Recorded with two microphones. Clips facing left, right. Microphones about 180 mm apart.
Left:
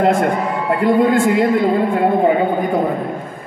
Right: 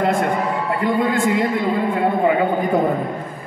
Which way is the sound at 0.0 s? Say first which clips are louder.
Left 3 dB; 55° left (ahead or behind).